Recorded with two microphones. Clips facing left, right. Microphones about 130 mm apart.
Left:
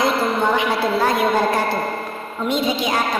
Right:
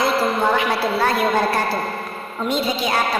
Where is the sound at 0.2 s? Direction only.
5° right (ahead or behind).